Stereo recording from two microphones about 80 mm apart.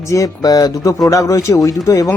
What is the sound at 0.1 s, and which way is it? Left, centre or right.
Speech, left.